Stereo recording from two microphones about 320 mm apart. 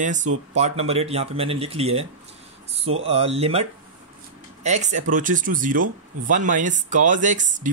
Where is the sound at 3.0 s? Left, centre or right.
Centre.